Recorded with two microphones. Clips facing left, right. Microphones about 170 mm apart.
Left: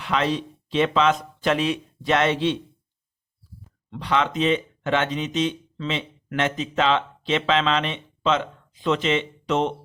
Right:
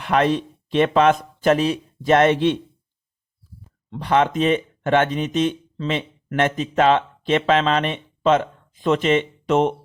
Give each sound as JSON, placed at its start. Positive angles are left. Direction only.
{"t": 0.0, "sound": "speech", "side_deg": -55}
{"t": 3.8, "sound": "speech", "side_deg": -45}